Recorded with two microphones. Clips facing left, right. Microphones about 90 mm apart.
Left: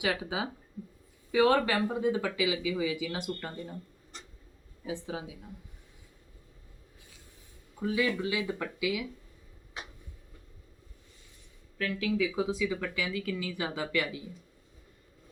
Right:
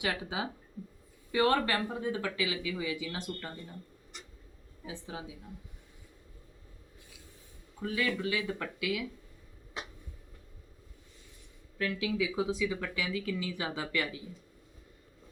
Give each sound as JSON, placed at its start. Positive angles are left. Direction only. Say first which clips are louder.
{"t": 0.0, "sound": "speech", "louder": "left 3 dB", "side_deg": 15}
{"t": 4.9, "sound": "speech", "louder": "left 6 dB", "side_deg": 20}
{"t": 7.8, "sound": "speech", "louder": "left 3 dB", "side_deg": 15}
{"t": 11.8, "sound": "speech", "louder": "left 2 dB", "side_deg": -5}